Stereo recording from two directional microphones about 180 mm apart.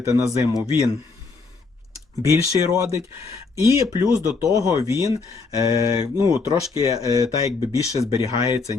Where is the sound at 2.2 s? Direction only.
15° right (ahead or behind).